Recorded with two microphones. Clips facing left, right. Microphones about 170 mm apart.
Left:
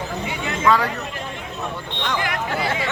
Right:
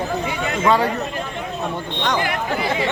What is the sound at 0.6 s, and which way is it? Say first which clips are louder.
Speech: right 1 dB; 25° right (ahead or behind).